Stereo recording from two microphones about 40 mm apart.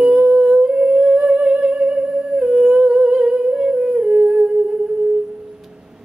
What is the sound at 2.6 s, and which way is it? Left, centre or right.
Humming, centre.